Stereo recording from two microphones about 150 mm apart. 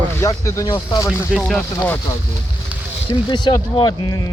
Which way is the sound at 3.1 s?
30° left (ahead or behind).